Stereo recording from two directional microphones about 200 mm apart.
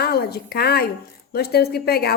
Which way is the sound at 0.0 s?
50° left (ahead or behind).